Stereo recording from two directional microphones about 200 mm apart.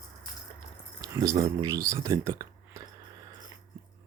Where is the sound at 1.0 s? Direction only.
15° right (ahead or behind).